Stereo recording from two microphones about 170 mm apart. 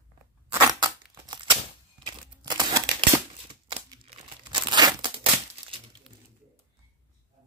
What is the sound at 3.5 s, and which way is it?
Crumpling, 30° right (ahead or behind).